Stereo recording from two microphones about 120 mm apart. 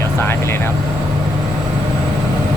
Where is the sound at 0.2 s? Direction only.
20° left (ahead or behind).